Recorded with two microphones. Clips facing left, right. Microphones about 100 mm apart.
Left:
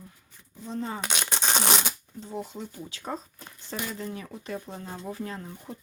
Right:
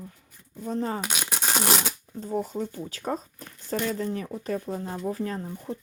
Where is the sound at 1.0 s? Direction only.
5° right (ahead or behind).